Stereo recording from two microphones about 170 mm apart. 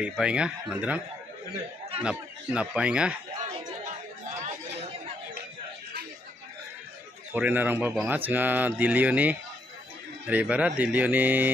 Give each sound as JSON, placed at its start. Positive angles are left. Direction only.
{"t": 0.0, "sound": "speech", "side_deg": -5}
{"t": 2.0, "sound": "speech", "side_deg": -5}
{"t": 4.4, "sound": "chatter", "side_deg": -45}
{"t": 7.3, "sound": "speech", "side_deg": -10}